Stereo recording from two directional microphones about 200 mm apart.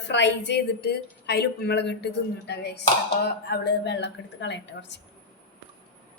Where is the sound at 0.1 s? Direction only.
60° left (ahead or behind).